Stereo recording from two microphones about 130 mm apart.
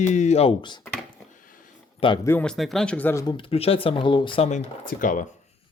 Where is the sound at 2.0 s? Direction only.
45° left (ahead or behind).